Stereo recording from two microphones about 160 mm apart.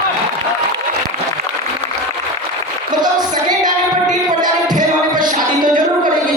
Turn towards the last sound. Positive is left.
turn(degrees=-60)  # may be behind; listen again after turning